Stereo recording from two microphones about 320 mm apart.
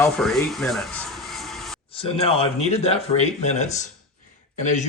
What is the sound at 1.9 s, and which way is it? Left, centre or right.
Speech, centre.